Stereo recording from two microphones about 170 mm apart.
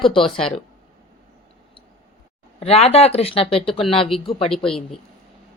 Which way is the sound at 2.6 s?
35° left (ahead or behind).